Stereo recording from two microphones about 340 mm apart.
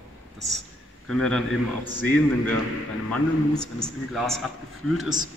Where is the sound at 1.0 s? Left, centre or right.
Centre.